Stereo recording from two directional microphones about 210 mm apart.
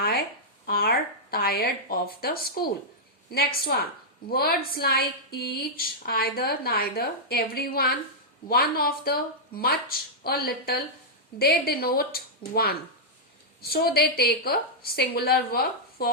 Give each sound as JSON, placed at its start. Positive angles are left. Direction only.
{"t": 0.6, "sound": "a woman's voice", "side_deg": 45}